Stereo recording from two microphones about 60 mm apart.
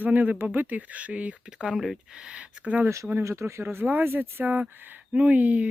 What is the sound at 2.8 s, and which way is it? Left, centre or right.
Speech, right.